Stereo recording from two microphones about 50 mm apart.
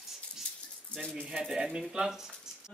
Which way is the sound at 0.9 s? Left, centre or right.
Centre.